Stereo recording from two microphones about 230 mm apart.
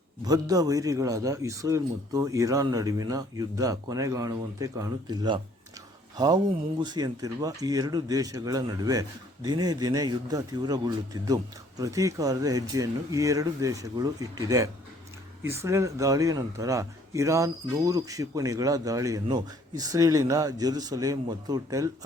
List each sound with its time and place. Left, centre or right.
0.3 s speech: centre